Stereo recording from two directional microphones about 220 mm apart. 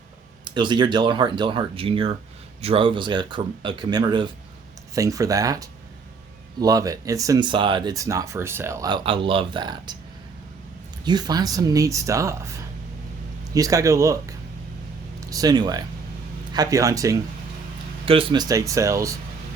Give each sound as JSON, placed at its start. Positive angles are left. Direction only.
{"t": 0.5, "sound": "speech", "side_deg": -20}
{"t": 11.0, "sound": "speech", "side_deg": -20}
{"t": 13.5, "sound": "speech", "side_deg": -15}